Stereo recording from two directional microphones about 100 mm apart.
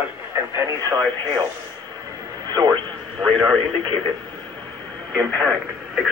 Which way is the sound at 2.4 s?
45° right (ahead or behind).